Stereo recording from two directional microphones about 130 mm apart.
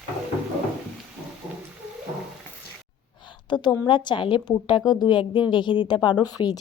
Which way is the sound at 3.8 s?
35° left (ahead or behind).